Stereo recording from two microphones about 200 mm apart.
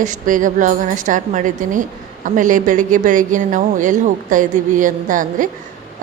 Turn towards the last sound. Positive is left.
turn(degrees=-40)  # may be behind; listen again after turning